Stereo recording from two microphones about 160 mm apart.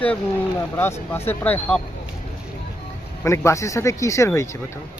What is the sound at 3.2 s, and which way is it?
Speech, 20° left (ahead or behind).